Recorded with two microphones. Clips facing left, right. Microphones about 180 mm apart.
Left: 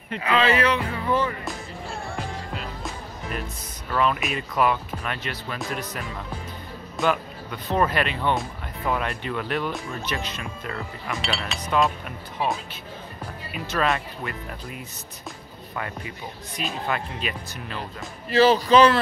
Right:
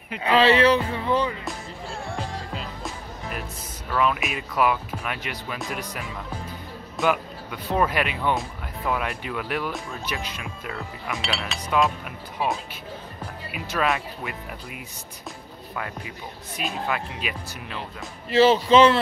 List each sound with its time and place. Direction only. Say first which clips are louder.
0.2 s speech: right 3 dB; 30° right (ahead or behind)
1.0 s speech: left 2 dB; 15° right (ahead or behind)
3.9 s speech: even; centre (ahead or behind)
7.1 s speech: right 1 dB; 10° right (ahead or behind)
13.5 s speech: left 1 dB; 10° right (ahead or behind)
18.3 s speech: even; 25° right (ahead or behind)